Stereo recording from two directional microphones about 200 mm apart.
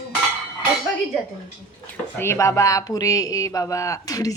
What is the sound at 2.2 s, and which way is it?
A man's voice, 15° left (ahead or behind).